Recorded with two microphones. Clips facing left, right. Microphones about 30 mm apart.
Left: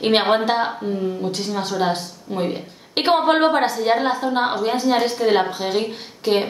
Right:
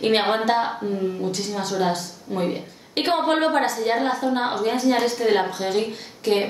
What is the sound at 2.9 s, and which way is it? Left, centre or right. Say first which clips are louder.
A woman's voice: left 4 dB; left.